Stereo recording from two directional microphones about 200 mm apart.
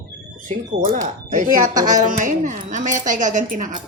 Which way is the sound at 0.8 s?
40° right (ahead or behind).